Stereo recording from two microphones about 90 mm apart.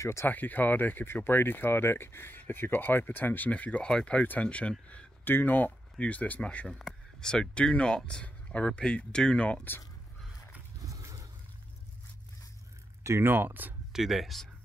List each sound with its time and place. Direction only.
0.0 s speech: 30° left (ahead or behind)
0.3 s speech: 20° left (ahead or behind)
10.9 s a sound: 35° right (ahead or behind)
13.0 s speech: 30° right (ahead or behind)
13.9 s speech: centre (ahead or behind)